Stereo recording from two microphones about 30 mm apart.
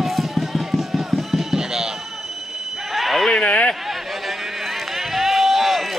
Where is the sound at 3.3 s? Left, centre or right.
Left.